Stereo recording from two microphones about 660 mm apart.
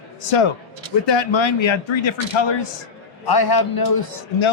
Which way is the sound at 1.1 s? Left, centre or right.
Left.